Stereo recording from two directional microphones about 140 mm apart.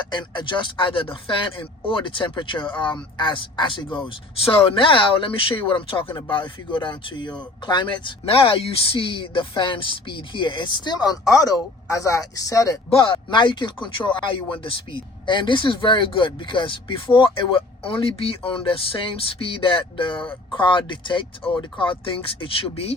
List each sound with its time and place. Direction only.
0.0 s speech: 35° left (ahead or behind)
12.9 s speech: 40° left (ahead or behind)